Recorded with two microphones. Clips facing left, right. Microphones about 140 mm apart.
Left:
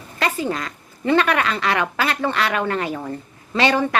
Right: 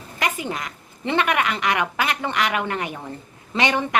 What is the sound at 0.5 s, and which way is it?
A woman's voice, 20° right (ahead or behind).